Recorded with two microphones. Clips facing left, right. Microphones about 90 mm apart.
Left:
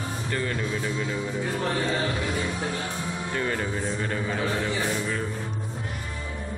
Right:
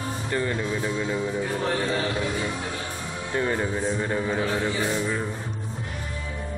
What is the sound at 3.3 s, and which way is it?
Speech, 20° right (ahead or behind).